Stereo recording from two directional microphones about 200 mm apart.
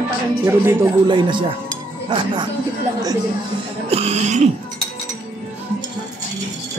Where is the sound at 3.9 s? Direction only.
30° right (ahead or behind).